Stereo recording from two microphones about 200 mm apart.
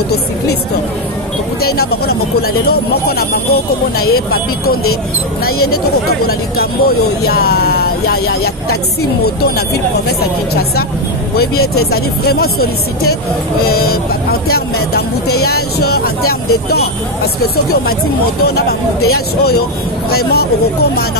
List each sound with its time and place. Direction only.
1.6 s speech: 50° left (ahead or behind)
6.0 s speech: 50° left (ahead or behind)
10.0 s speech: 50° left (ahead or behind)
11.5 s speech: 90° left
11.9 s speech: 50° left (ahead or behind)
15.8 s speech: 50° left (ahead or behind)
18.4 s speech: 50° left (ahead or behind)